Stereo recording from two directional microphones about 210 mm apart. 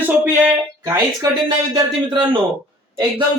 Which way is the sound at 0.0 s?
10° right (ahead or behind).